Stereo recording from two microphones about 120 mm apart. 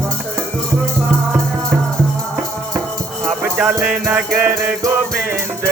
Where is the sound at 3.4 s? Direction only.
15° right (ahead or behind).